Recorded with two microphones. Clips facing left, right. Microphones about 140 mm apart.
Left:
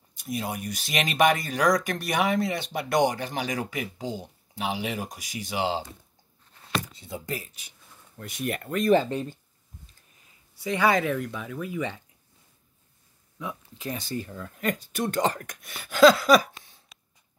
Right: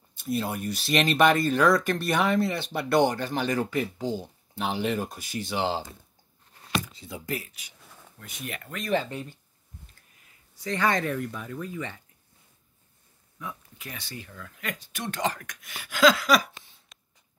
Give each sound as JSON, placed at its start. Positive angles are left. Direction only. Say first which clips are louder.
{"t": 0.2, "sound": "speech", "louder": "right 2 dB", "side_deg": 15}
{"t": 7.1, "sound": "speech", "louder": "even", "side_deg": 30}
{"t": 8.4, "sound": "speech", "louder": "left 9 dB", "side_deg": 50}
{"t": 10.6, "sound": "speech", "louder": "left 3 dB", "side_deg": 10}
{"t": 11.7, "sound": "speech", "louder": "left 5 dB", "side_deg": 15}
{"t": 13.9, "sound": "speech", "louder": "left 7 dB", "side_deg": 40}